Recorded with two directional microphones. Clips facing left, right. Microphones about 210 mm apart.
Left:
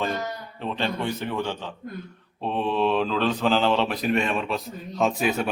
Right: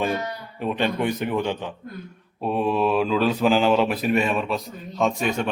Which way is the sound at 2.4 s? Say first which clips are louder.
Right 2 dB; 10° right (ahead or behind).